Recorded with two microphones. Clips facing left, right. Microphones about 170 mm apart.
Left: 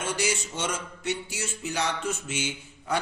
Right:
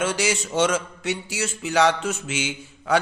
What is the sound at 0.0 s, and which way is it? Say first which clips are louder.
A man's voice: right 5 dB; 90° right.